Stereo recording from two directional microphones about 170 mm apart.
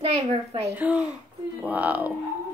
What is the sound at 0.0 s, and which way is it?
Speech, 35° right (ahead or behind).